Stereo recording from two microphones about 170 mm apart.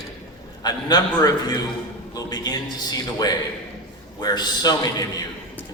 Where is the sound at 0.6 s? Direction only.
25° left (ahead or behind).